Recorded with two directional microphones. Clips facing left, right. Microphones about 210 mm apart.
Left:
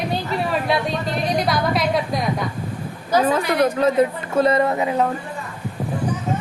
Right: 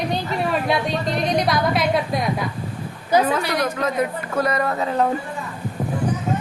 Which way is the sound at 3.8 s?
30° left (ahead or behind).